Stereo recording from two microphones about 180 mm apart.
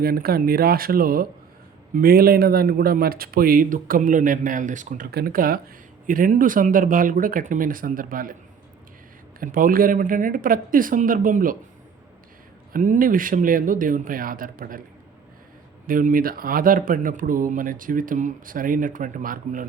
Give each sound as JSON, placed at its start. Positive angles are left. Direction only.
{"t": 0.0, "sound": "speech", "side_deg": -55}
{"t": 5.1, "sound": "speech", "side_deg": -55}
{"t": 9.4, "sound": "speech", "side_deg": -50}
{"t": 12.7, "sound": "speech", "side_deg": -45}
{"t": 15.9, "sound": "speech", "side_deg": -50}